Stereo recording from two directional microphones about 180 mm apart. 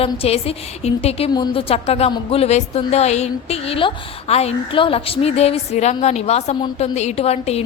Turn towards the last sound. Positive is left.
turn(degrees=35)  # may be behind; listen again after turning